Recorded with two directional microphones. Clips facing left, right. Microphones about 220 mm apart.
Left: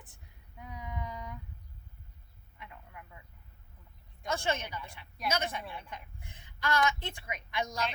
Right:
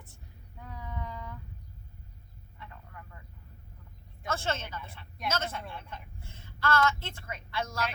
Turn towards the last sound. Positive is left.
turn(degrees=15)  # may be behind; listen again after turning